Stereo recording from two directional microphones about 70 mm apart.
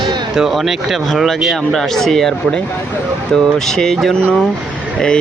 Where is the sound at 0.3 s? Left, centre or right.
Centre.